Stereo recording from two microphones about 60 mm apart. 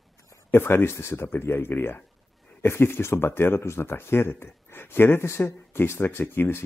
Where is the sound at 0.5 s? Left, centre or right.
Left.